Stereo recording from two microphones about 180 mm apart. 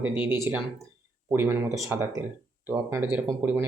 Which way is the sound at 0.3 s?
15° right (ahead or behind).